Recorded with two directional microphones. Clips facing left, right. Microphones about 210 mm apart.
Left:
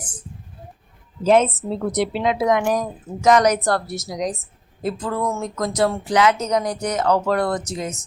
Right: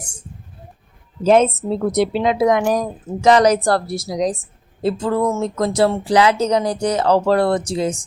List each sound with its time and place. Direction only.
1.2 s speech: 40° right (ahead or behind)